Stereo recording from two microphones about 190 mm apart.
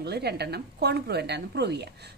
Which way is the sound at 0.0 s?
60° right (ahead or behind).